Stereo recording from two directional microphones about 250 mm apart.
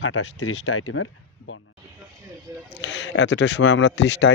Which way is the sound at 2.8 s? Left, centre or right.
Left.